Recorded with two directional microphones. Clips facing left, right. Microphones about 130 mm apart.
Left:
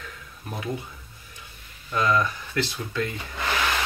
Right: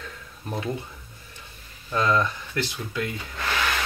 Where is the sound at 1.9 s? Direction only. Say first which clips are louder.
Even; 25° right (ahead or behind).